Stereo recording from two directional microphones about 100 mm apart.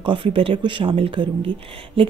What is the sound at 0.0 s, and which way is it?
Speech, 60° right (ahead or behind).